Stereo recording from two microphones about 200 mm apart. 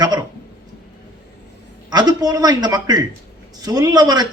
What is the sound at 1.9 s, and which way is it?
A man's voice, 20° right (ahead or behind).